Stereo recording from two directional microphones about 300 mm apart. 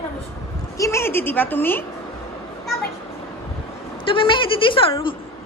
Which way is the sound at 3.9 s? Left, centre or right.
Centre.